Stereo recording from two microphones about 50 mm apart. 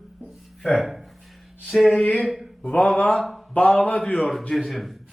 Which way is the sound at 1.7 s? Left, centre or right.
Centre.